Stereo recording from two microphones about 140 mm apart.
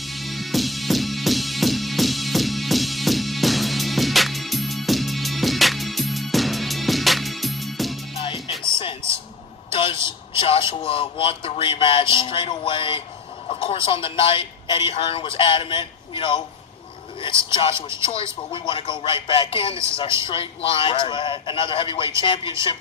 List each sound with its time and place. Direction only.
0.0 s music: centre (ahead or behind)
8.1 s music: 40° left (ahead or behind)
9.7 s vehicle: 40° left (ahead or behind)
10.7 s a sound: 40° left (ahead or behind)
13.5 s a man's voice: 40° left (ahead or behind)
17.7 s speech: 20° right (ahead or behind)
18.3 s a man's voice: 35° left (ahead or behind)